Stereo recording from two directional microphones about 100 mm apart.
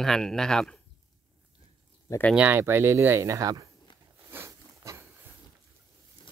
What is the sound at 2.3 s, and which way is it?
Speech, 20° right (ahead or behind).